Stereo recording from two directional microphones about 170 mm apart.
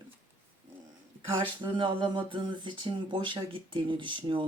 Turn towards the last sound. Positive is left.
turn(degrees=-30)  # may be behind; listen again after turning